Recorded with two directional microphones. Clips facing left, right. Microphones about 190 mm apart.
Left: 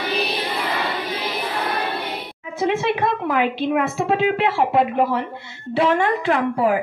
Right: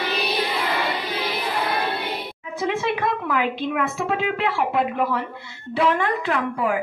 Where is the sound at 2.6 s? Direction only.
25° left (ahead or behind).